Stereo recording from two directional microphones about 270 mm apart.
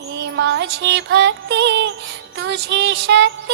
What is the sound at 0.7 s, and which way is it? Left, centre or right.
Music, right.